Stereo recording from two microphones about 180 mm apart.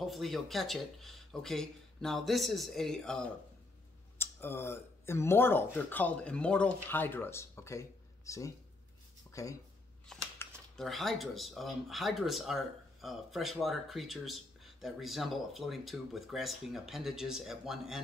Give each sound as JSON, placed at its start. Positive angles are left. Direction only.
{"t": 0.0, "sound": "speech", "side_deg": 0}
{"t": 10.0, "sound": "speech", "side_deg": 5}